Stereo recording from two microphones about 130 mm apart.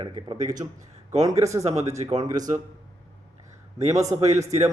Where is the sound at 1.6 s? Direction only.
55° right (ahead or behind).